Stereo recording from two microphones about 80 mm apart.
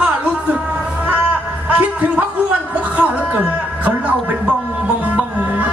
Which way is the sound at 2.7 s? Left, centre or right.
Centre.